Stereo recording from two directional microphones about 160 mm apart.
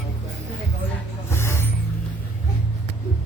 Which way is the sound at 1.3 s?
15° left (ahead or behind).